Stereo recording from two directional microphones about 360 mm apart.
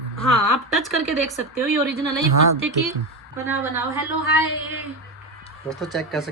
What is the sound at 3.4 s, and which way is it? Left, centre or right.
Speech, centre.